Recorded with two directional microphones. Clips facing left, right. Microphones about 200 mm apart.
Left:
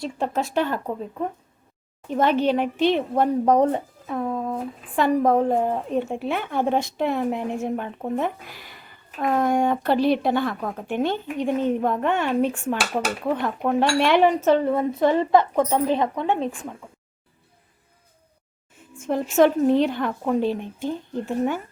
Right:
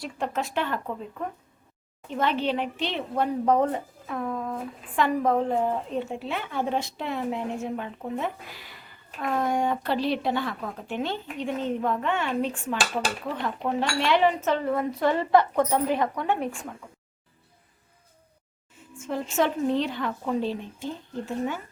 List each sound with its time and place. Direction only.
0.0 s speech: 35° left (ahead or behind)
2.0 s a woman's voice: 45° left (ahead or behind)
4.1 s a sound: 30° left (ahead or behind)
4.9 s a woman's voice: 40° left (ahead or behind)
14.6 s a woman's voice: 25° left (ahead or behind)
18.9 s a woman's voice: 50° left (ahead or behind)